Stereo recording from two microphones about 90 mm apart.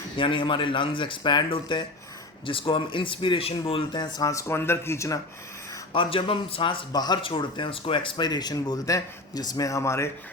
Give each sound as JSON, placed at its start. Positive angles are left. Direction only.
{"t": 0.2, "sound": "speech", "side_deg": 70}
{"t": 2.5, "sound": "speech", "side_deg": 80}
{"t": 3.9, "sound": "speech", "side_deg": 50}
{"t": 5.9, "sound": "speech", "side_deg": 75}
{"t": 6.9, "sound": "speech", "side_deg": 50}
{"t": 7.2, "sound": "speech", "side_deg": 80}